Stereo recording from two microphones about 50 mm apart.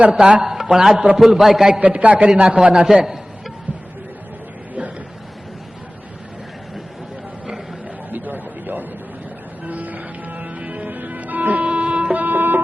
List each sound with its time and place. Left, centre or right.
0.1 s a man's voice: centre
1.8 s a man's voice: right
2.7 s a man's voice: centre
8.1 s a sound: right
9.6 s music: right